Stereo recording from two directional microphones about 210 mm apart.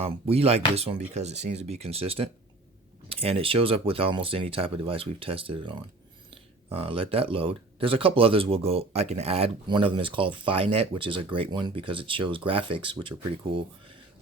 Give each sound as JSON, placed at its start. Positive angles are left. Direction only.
{"t": 0.0, "sound": "speech", "side_deg": -30}